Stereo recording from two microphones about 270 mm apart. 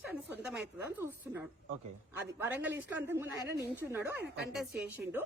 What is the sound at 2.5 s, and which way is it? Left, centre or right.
A woman's voice, centre.